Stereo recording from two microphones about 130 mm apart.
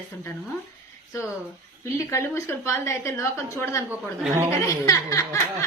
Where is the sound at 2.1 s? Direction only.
20° left (ahead or behind).